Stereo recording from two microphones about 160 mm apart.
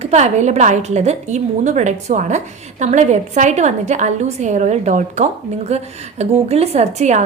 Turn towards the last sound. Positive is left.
turn(degrees=-45)  # may be behind; listen again after turning